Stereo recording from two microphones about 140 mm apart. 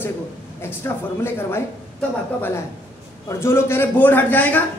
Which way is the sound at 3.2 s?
20° left (ahead or behind).